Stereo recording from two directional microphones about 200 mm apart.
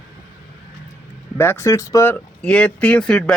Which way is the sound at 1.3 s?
15° left (ahead or behind).